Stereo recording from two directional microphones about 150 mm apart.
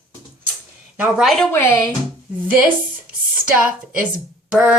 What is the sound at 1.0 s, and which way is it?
Speech, centre (ahead or behind).